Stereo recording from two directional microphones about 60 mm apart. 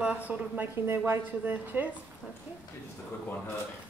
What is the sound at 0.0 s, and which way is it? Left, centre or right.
Speech, right.